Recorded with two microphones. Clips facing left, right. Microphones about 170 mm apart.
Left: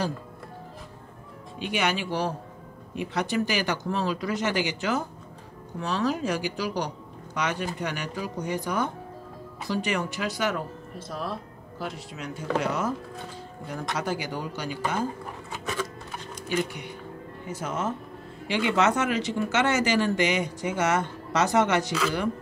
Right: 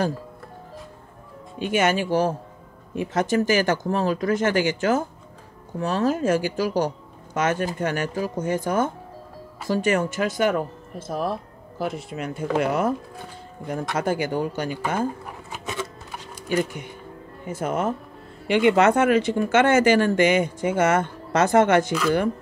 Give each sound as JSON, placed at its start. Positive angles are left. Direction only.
{"t": 1.6, "sound": "speech", "side_deg": -45}
{"t": 13.9, "sound": "speech", "side_deg": -50}
{"t": 16.4, "sound": "speech", "side_deg": -50}